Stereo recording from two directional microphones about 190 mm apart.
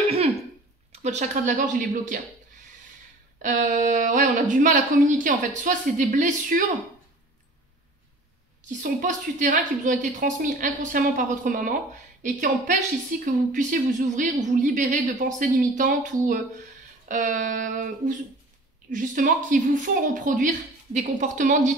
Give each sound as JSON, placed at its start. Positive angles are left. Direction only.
{"t": 0.9, "sound": "a woman's voice", "side_deg": -40}
{"t": 8.6, "sound": "a woman's voice", "side_deg": -40}